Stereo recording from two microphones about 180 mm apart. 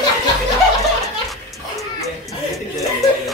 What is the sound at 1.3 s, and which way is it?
Music, centre (ahead or behind).